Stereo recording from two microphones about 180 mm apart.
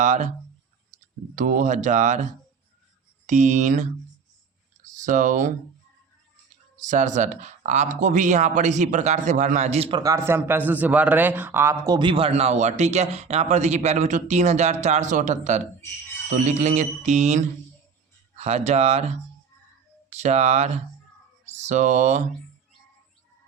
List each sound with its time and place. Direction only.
0.0 s a man's voice: 40° right (ahead or behind)
1.4 s speech: 45° right (ahead or behind)
3.2 s speech: 45° right (ahead or behind)
4.8 s a sound: 45° right (ahead or behind)
6.7 s a man's voice: 45° right (ahead or behind)
10.0 s speech: 15° right (ahead or behind)
11.9 s a man's voice: 30° right (ahead or behind)